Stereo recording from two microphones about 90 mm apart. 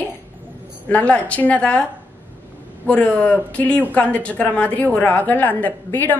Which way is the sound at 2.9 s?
15° left (ahead or behind).